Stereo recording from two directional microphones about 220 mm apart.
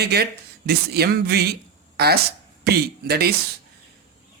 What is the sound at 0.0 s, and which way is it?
Speech, 45° right (ahead or behind).